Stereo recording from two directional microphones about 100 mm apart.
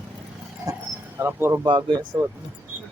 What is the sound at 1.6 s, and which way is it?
Speech, 50° right (ahead or behind).